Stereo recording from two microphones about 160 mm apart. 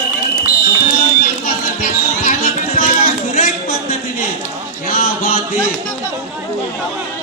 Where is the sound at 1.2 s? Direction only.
60° left (ahead or behind).